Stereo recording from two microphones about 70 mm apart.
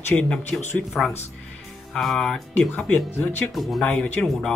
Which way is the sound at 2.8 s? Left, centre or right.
Centre.